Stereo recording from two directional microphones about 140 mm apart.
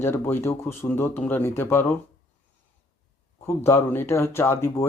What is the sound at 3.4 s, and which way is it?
Speech, 20° left (ahead or behind).